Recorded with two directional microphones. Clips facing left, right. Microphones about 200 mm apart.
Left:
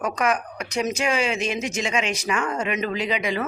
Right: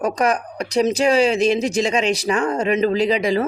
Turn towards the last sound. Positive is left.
turn(degrees=-35)  # may be behind; listen again after turning